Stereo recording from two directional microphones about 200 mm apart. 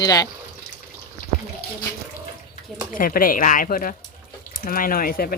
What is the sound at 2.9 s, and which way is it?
Speech, 45° left (ahead or behind).